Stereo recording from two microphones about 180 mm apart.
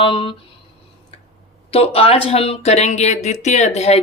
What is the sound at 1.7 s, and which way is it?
Speech, 30° left (ahead or behind).